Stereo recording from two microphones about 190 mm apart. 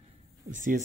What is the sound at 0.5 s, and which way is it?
Speech, 40° right (ahead or behind).